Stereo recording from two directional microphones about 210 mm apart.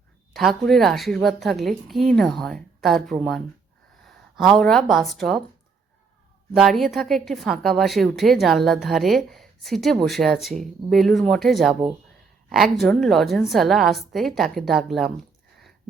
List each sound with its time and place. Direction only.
0.3 s a woman's voice: centre (ahead or behind)
6.6 s a woman's voice: centre (ahead or behind)